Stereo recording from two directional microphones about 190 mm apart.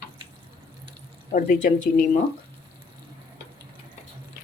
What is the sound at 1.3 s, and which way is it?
Speech, 40° left (ahead or behind).